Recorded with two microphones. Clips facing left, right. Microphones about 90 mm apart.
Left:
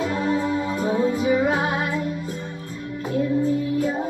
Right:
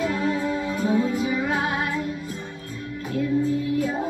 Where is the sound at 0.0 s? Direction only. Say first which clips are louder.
Left 1 dB; 30° left (ahead or behind).